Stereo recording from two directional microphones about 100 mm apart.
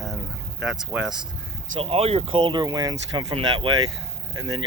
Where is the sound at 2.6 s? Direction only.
35° right (ahead or behind).